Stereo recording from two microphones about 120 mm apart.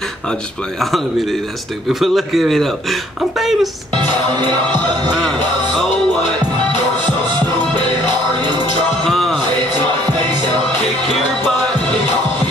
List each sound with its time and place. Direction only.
1.9 s speech: centre (ahead or behind)
3.9 s music: 35° right (ahead or behind)
9.0 s music: centre (ahead or behind)